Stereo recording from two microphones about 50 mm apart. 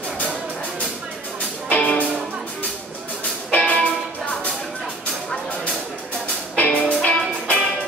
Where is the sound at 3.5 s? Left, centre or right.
Left.